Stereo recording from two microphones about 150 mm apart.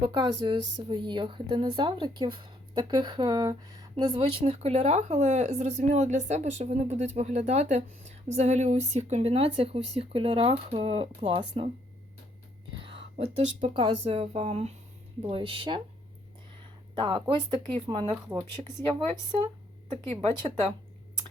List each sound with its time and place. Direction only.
0.0 s speech: 30° right (ahead or behind)
4.2 s speech: 40° right (ahead or behind)
12.8 s speech: 35° right (ahead or behind)
15.2 s speech: 35° right (ahead or behind)
16.9 s speech: 35° right (ahead or behind)